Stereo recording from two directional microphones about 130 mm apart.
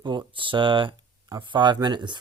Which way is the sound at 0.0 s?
35° right (ahead or behind).